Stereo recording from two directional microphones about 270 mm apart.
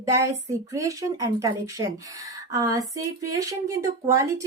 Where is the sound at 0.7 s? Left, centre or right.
Centre.